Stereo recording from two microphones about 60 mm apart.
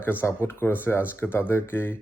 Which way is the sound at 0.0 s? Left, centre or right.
Left.